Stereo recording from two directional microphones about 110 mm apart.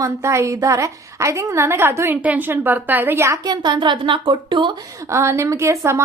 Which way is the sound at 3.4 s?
40° right (ahead or behind).